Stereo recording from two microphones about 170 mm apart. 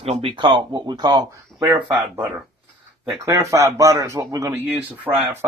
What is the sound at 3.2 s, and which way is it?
Speech, 15° right (ahead or behind).